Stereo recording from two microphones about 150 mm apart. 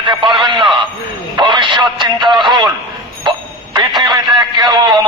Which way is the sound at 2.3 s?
Centre (ahead or behind).